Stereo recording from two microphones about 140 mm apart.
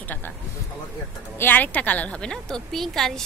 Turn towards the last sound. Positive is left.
turn(degrees=5)  # may be behind; listen again after turning